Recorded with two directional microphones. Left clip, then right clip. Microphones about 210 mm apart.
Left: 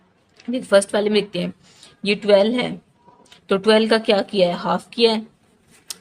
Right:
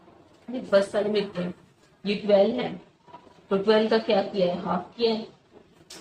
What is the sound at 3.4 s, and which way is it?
A woman's voice, 60° left (ahead or behind).